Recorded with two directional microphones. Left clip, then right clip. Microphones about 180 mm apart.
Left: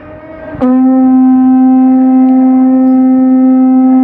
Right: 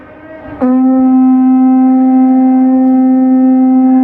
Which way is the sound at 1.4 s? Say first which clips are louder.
Left 1 dB; 5° right (ahead or behind).